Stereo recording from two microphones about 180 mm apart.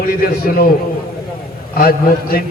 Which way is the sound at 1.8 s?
55° left (ahead or behind).